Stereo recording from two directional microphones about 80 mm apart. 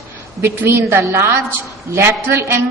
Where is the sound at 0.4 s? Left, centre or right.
Right.